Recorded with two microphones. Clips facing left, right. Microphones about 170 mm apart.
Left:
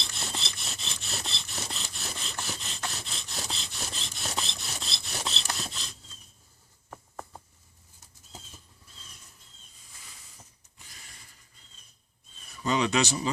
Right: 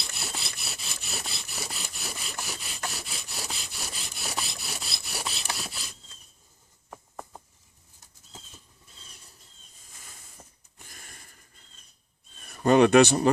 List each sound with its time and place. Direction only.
0.0 s rub: 10° right (ahead or behind)
10.0 s a sound: 50° right (ahead or behind)
12.5 s speech: 55° right (ahead or behind)